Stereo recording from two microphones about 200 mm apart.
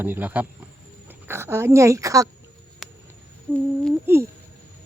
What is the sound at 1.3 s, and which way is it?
A woman's voice, 10° right (ahead or behind).